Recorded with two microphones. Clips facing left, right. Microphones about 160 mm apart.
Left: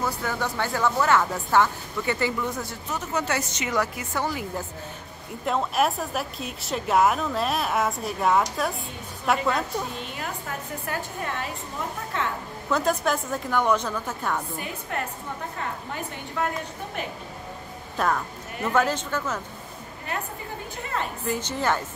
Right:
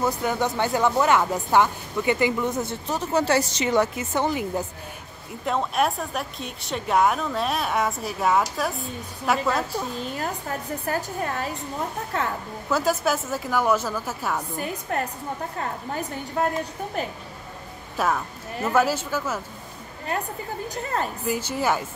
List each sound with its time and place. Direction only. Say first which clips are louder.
0.0 s speech: right 4 dB; 20° right (ahead or behind)
5.4 s a woman's voice: even; centre (ahead or behind)
9.9 s a woman's voice: right 4 dB; 40° right (ahead or behind)
12.6 s a woman's voice: right 1 dB; 5° right (ahead or behind)
14.6 s a woman's voice: right 4 dB; 40° right (ahead or behind)
17.9 s a woman's voice: right 1 dB; 5° right (ahead or behind)
20.7 s a woman's voice: right 3 dB; 40° right (ahead or behind)
21.3 s a woman's voice: right 1 dB; 10° right (ahead or behind)